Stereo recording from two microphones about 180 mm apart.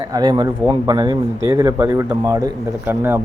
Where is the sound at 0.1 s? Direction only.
25° right (ahead or behind).